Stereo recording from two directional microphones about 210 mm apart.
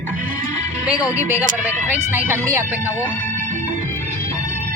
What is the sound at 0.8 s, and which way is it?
Speech, 5° right (ahead or behind).